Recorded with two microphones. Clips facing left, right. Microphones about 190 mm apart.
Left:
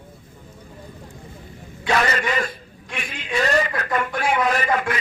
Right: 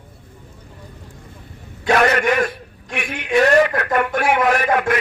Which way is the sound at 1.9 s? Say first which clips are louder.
Right 5 dB; 60° right (ahead or behind).